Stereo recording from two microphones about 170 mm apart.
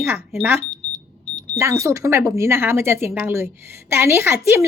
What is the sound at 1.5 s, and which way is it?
Speech, 15° right (ahead or behind).